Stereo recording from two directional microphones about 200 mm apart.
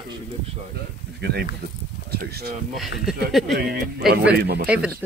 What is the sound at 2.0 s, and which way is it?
Speech, 50° right (ahead or behind).